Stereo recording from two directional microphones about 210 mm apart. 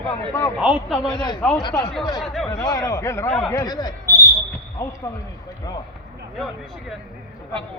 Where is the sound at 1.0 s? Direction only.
20° left (ahead or behind).